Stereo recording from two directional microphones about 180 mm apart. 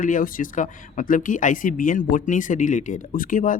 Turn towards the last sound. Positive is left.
turn(degrees=50)  # may be behind; listen again after turning